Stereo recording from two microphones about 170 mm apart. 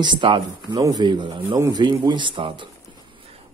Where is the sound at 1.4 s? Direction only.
20° right (ahead or behind).